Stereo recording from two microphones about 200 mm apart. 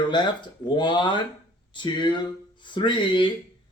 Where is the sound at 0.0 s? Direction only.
20° left (ahead or behind).